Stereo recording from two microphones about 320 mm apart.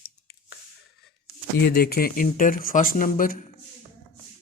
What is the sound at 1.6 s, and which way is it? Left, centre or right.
A man's voice, left.